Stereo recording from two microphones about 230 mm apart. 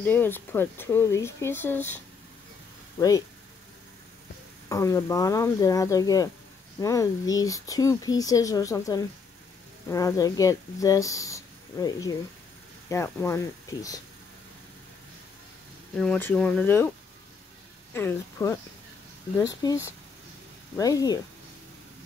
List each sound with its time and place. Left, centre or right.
0.0 s speech: centre
3.0 s speech: centre
4.6 s speech: centre
16.0 s speech: centre
17.9 s speech: centre